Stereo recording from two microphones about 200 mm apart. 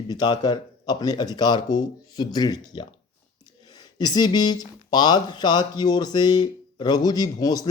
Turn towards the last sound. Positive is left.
turn(degrees=20)  # may be behind; listen again after turning